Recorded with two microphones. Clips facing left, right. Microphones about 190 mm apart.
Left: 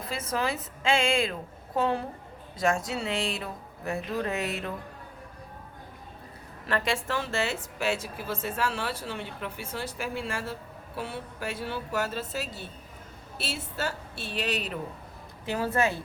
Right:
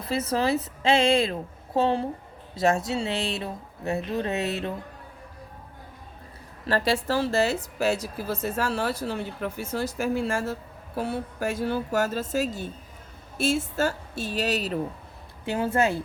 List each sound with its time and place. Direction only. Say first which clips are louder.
0.1 s a woman's voice: right 6 dB; 35° right (ahead or behind)
6.7 s a woman's voice: right 5 dB; 35° right (ahead or behind)
15.4 s a woman's voice: right 3 dB; 25° right (ahead or behind)